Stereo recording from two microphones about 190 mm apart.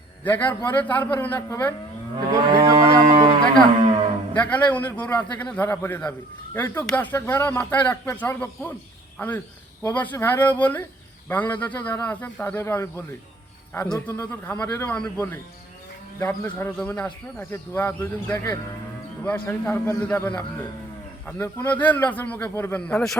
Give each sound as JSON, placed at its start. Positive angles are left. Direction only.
{"t": 0.3, "sound": "a man's voice", "side_deg": 10}
{"t": 2.3, "sound": "moo", "side_deg": -20}
{"t": 4.4, "sound": "a man's voice", "side_deg": 10}
{"t": 13.9, "sound": "a man's voice", "side_deg": 15}